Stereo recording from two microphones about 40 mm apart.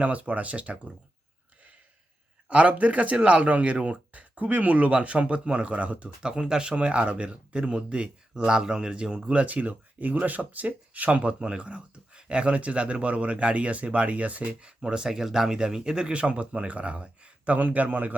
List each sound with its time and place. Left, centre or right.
0.0 s speech: right
2.5 s speech: right
6.2 s speech: right
9.3 s speech: right
14.8 s speech: centre; by 18.1 s right